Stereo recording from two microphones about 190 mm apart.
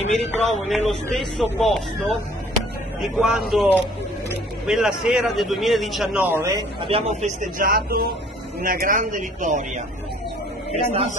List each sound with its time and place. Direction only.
0.1 s a man's voice: centre (ahead or behind)
6.9 s a man's voice: 35° right (ahead or behind)
10.8 s a man's voice: 35° right (ahead or behind)